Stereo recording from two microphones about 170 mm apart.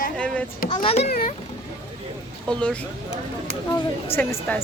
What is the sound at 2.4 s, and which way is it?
Speech, 5° left (ahead or behind).